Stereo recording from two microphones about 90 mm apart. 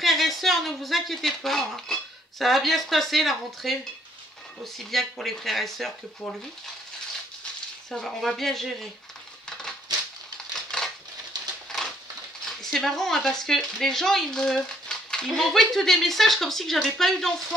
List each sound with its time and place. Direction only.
0.0 s speech: centre (ahead or behind)
4.7 s speech: centre (ahead or behind)
7.9 s speech: 5° left (ahead or behind)
9.5 s a sound: 5° left (ahead or behind)
10.5 s crushing: 5° left (ahead or behind)
11.3 s a sound: 50° right (ahead or behind)
12.4 s speech: 5° left (ahead or behind)